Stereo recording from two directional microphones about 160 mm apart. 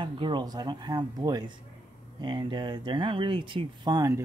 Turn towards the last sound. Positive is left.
turn(degrees=-20)  # may be behind; listen again after turning